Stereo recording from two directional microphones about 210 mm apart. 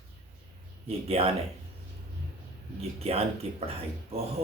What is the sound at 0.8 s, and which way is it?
Speech, 30° right (ahead or behind).